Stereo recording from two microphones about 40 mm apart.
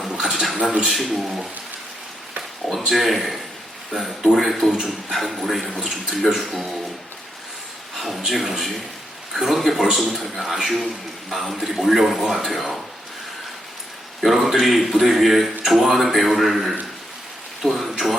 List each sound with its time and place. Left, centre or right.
0.1 s a sound: centre
0.6 s a man's voice: right
0.9 s a man's voice: centre
2.6 s a man's voice: centre
4.6 s a man's voice: centre
7.9 s a man's voice: centre
14.2 s a man's voice: centre